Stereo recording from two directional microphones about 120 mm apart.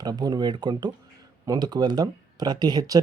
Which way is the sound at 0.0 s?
35° right (ahead or behind).